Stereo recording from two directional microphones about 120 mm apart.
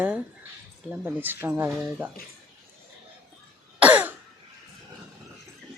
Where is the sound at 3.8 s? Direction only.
10° right (ahead or behind).